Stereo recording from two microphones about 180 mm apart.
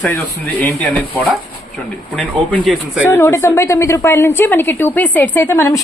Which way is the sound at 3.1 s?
15° left (ahead or behind).